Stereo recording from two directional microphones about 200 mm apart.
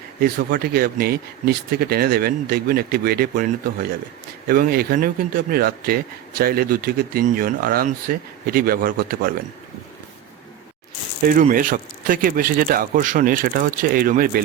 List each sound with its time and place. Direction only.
0.2 s speech: 50° right (ahead or behind)
11.3 s speech: 45° right (ahead or behind)